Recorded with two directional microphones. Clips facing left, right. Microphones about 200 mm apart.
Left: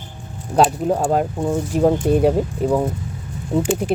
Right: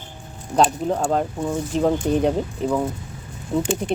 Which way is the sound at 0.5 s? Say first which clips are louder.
Left 3 dB; 10° left (ahead or behind).